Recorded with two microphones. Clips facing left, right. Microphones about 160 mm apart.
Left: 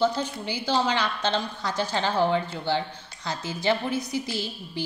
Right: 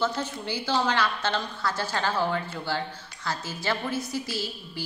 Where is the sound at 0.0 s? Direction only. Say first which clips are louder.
Left 4 dB; 15° left (ahead or behind).